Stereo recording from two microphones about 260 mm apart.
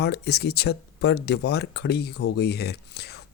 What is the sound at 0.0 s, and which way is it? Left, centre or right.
Speech, left.